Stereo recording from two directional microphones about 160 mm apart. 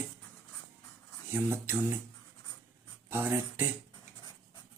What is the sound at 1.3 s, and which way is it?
Speech, 15° right (ahead or behind).